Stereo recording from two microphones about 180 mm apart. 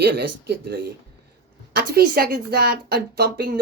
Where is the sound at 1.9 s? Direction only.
60° right (ahead or behind).